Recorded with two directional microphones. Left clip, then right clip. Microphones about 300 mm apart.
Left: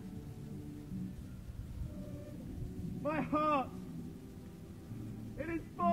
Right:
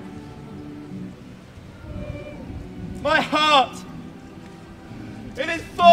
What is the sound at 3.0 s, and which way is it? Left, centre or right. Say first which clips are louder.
Speech: right 16 dB; right.